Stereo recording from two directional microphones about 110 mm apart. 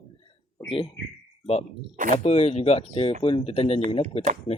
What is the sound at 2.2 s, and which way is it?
Speech, 75° left (ahead or behind).